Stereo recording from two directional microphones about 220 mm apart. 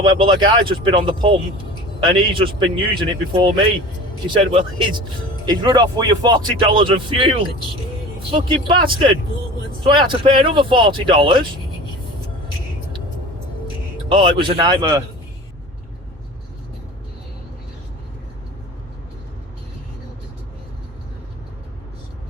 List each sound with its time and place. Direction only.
0.0 s speech: 20° right (ahead or behind)
14.1 s speech: 20° right (ahead or behind)